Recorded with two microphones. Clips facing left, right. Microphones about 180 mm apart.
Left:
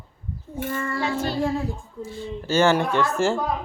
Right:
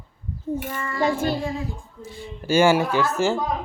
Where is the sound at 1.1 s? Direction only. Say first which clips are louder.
Even; 15° right (ahead or behind).